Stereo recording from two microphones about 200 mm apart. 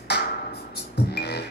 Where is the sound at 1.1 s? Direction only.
55° left (ahead or behind).